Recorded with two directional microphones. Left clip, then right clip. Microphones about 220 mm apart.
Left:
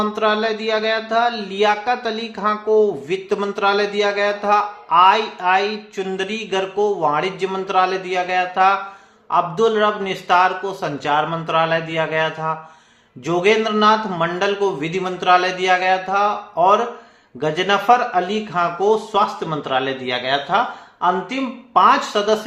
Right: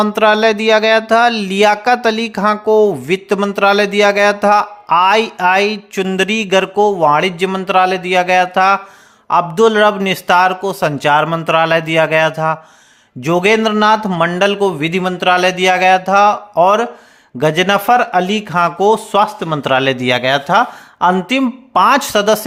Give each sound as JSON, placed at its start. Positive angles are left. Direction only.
{"t": 0.0, "sound": "speech", "side_deg": -50}